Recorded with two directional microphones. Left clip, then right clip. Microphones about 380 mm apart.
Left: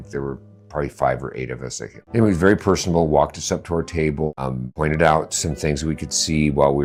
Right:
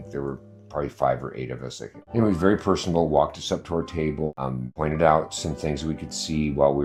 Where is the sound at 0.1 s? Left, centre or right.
Left.